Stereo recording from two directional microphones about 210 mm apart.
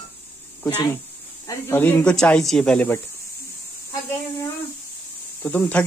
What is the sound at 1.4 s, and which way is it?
Speech, 15° left (ahead or behind).